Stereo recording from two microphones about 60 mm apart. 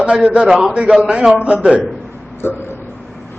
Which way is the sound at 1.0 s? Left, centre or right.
Centre.